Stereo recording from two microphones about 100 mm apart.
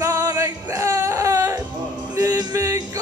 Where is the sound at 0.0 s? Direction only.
30° right (ahead or behind).